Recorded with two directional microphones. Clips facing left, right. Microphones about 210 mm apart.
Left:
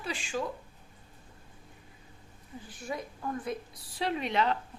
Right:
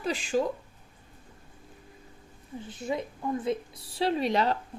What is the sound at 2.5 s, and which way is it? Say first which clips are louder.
A woman's voice: right 6 dB; 25° right (ahead or behind).